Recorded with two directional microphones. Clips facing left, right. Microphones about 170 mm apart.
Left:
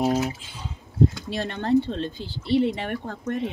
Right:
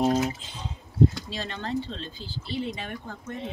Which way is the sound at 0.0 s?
5° left (ahead or behind).